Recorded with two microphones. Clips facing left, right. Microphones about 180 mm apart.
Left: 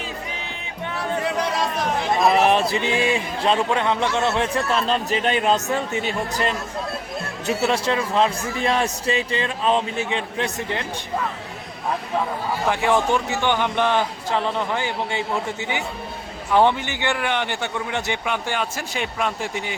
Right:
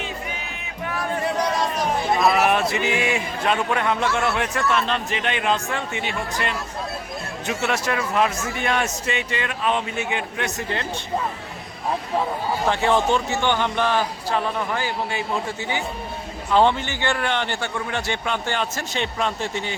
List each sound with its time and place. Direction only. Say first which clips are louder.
2.3 s a man's voice: left 2 dB; 30° left (ahead or behind)
12.6 s a man's voice: even; 10° left (ahead or behind)